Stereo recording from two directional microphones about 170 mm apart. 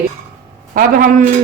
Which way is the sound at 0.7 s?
55° right (ahead or behind).